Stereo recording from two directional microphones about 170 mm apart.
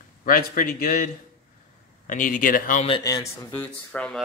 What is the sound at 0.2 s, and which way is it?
A man's voice, 55° left (ahead or behind).